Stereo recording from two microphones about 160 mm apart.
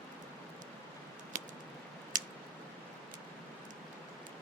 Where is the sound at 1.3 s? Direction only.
55° right (ahead or behind).